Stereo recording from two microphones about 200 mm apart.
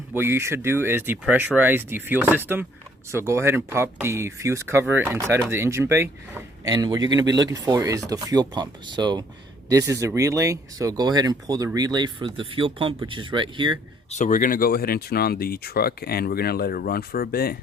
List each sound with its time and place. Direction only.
0.1 s speech: 10° right (ahead or behind)
14.1 s speech: 40° left (ahead or behind)